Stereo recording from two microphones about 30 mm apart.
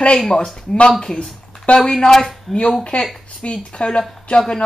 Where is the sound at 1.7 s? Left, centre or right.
Left.